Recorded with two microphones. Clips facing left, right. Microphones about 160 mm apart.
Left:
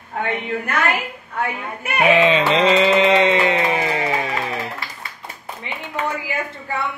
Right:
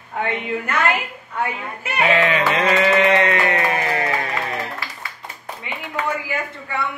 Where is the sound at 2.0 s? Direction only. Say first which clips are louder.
Left 3 dB; 20° left (ahead or behind).